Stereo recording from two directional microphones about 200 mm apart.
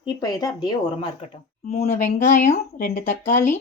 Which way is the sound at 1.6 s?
40° left (ahead or behind).